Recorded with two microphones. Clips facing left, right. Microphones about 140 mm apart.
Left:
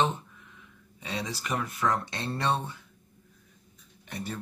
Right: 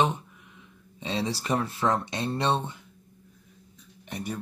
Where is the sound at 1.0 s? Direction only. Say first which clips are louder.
Right 5 dB; 25° right (ahead or behind).